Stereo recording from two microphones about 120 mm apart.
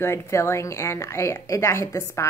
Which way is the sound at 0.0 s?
20° left (ahead or behind).